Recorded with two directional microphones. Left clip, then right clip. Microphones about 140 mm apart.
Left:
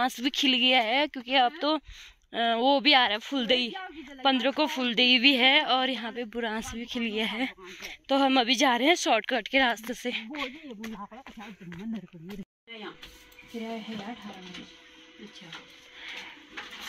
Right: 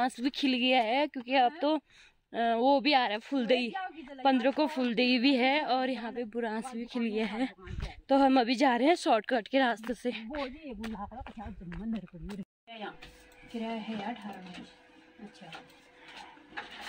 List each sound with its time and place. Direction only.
0.0 s speech: 5° right (ahead or behind)
9.0 s speech: 30° right (ahead or behind)
11.7 s speech: centre (ahead or behind)